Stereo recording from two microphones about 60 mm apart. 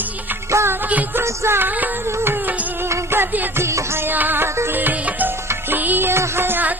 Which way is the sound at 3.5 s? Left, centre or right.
Right.